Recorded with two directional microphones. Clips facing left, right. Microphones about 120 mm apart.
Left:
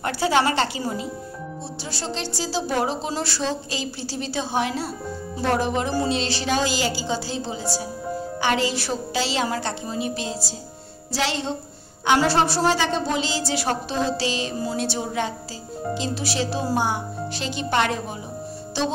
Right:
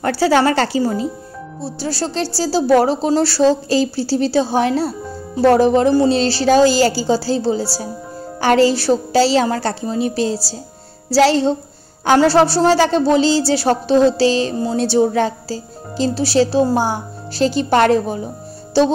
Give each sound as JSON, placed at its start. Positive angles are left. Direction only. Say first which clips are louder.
{"t": 0.3, "sound": "speech", "louder": "right 5 dB", "side_deg": -40}